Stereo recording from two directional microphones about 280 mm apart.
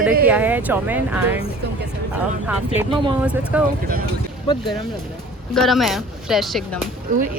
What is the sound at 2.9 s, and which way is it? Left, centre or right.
Speech, centre.